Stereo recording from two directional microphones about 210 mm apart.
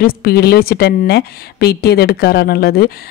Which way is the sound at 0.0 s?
45° left (ahead or behind).